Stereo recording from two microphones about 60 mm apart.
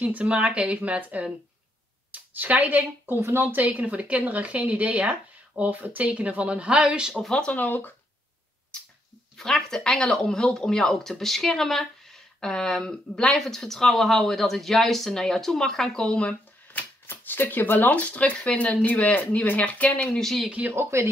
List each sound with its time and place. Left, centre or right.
0.0 s speech: right
3.2 s speech: right
3.5 s speech: right
7.2 s speech: centre
7.5 s speech: left
9.4 s speech: centre
17.0 s speech: left
20.2 s speech: centre
20.7 s speech: right